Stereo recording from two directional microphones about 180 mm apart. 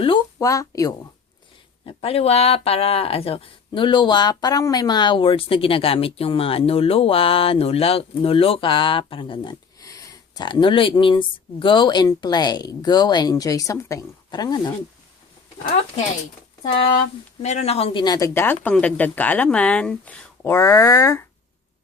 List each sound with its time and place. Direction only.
0.3 s speech: 20° left (ahead or behind)
1.8 s speech: 30° left (ahead or behind)
17.4 s speech: 40° left (ahead or behind); by 21.2 s 15° left (ahead or behind)